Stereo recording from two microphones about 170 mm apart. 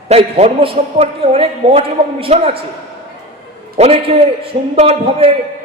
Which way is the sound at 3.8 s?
35° right (ahead or behind).